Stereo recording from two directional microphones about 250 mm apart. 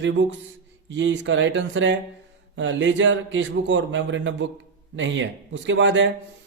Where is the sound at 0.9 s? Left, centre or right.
Right.